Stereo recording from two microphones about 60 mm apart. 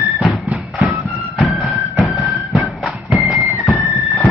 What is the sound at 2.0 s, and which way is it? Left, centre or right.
Music, centre.